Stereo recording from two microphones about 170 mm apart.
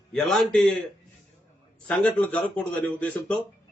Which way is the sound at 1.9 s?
10° left (ahead or behind).